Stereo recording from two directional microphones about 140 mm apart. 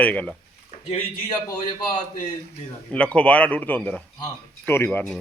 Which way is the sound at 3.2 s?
10° left (ahead or behind).